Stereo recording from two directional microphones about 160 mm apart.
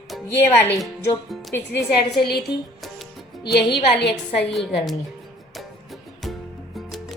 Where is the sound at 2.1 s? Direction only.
90° left.